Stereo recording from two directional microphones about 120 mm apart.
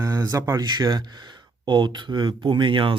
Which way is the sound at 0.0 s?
25° right (ahead or behind).